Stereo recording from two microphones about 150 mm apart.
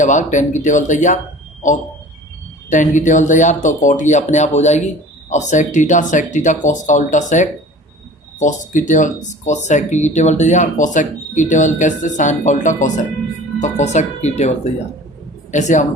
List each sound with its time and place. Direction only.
0.0 s speech: 55° left (ahead or behind)
2.6 s speech: 55° left (ahead or behind)